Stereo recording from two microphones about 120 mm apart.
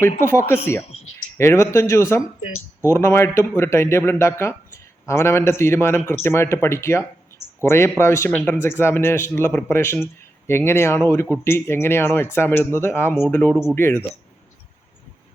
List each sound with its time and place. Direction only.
0.3 s speech: 20° left (ahead or behind)